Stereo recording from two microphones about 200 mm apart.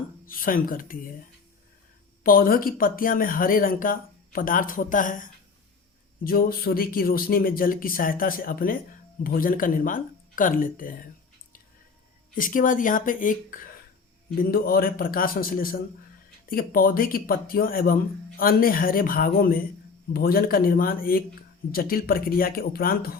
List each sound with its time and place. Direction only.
0.3 s speech: 45° left (ahead or behind)
2.2 s speech: 45° left (ahead or behind)
12.3 s speech: 45° left (ahead or behind)